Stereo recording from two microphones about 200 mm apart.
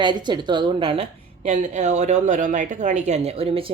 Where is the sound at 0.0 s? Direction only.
20° right (ahead or behind).